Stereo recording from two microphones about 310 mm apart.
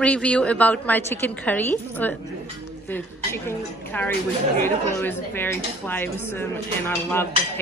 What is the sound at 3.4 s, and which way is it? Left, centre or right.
A woman's voice, centre.